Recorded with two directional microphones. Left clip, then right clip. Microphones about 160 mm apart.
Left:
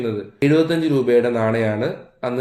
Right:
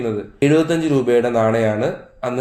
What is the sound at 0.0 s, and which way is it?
Speech, 15° right (ahead or behind).